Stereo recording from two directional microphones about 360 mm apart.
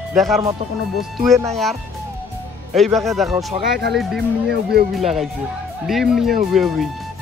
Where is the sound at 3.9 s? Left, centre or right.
Centre.